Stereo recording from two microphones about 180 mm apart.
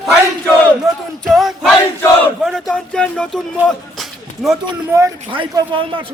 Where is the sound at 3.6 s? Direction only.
Centre (ahead or behind).